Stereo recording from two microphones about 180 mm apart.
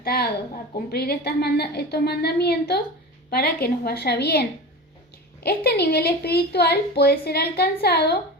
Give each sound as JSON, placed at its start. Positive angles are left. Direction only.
{"t": 0.0, "sound": "a woman's voice", "side_deg": 60}